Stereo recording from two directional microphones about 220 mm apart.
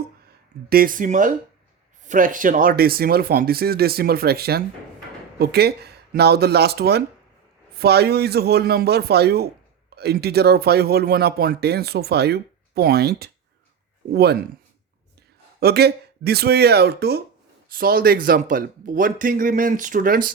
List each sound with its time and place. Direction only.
0.7 s speech: 40° right (ahead or behind)
15.6 s speech: 45° right (ahead or behind)